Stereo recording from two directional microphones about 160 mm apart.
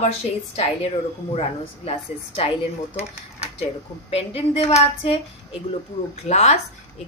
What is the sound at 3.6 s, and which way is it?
Speech, 40° left (ahead or behind).